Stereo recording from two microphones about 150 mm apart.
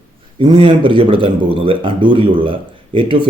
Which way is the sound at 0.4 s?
30° right (ahead or behind).